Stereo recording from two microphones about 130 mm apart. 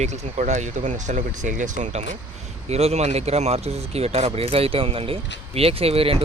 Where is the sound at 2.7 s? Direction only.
55° right (ahead or behind).